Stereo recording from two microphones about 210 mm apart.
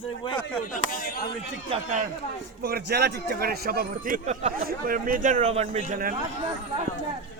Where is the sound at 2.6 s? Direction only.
45° right (ahead or behind); by 5.9 s 30° right (ahead or behind).